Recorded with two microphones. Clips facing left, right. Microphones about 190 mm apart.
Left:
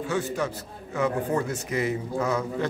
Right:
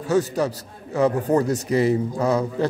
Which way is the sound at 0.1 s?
40° right (ahead or behind).